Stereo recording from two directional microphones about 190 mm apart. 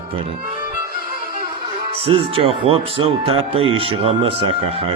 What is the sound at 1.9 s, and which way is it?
Speech, 30° right (ahead or behind).